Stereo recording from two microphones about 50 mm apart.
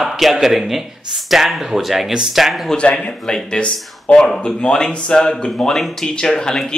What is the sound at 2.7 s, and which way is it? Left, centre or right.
A man's voice, left.